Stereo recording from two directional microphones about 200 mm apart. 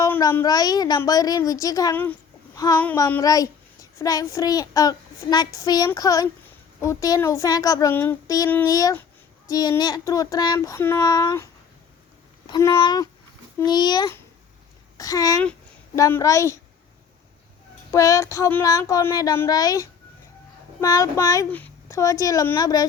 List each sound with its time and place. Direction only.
0.0 s a child's voice: 15° left (ahead or behind)
12.5 s a child's voice: 20° left (ahead or behind)
17.9 s a child's voice: 15° left (ahead or behind)